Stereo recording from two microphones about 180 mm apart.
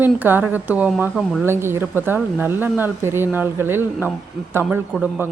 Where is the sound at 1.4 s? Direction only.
15° right (ahead or behind).